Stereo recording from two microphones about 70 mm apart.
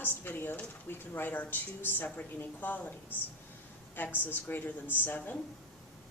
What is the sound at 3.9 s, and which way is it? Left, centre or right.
Speech, left.